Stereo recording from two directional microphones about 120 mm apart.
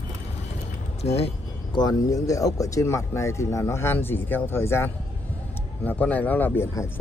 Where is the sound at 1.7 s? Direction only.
35° left (ahead or behind).